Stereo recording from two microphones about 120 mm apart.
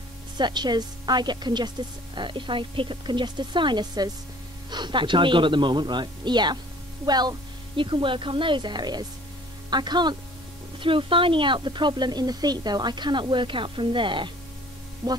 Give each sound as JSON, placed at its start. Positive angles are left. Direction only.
{"t": 0.4, "sound": "speech", "side_deg": -35}